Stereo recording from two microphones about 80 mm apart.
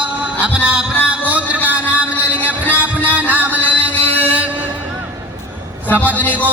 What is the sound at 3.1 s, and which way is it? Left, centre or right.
Music, right.